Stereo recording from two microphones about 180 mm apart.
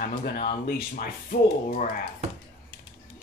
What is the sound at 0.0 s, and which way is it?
Speech, 50° left (ahead or behind).